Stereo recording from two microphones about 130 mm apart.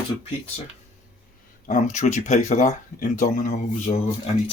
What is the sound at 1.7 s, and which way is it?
Speech, 75° left (ahead or behind).